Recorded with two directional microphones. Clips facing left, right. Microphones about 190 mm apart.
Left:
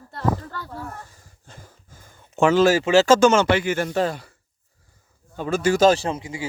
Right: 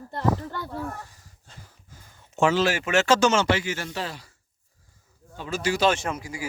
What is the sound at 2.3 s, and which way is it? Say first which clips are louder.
Speech: left 5 dB; 55° left (ahead or behind).